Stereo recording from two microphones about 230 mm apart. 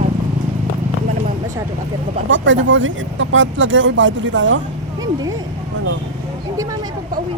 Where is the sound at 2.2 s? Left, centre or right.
Right.